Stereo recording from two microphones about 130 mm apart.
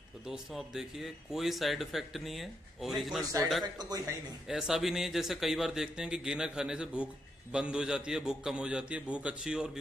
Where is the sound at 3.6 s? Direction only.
30° right (ahead or behind).